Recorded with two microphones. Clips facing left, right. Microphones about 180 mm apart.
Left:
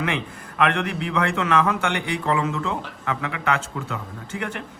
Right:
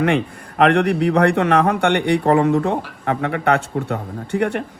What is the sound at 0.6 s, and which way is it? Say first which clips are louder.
A man's voice: right 8 dB; 60° right (ahead or behind).